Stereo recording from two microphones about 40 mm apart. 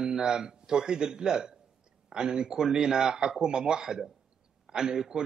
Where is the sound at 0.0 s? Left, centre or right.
Centre.